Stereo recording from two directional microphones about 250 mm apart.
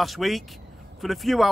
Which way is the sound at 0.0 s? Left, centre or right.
Centre.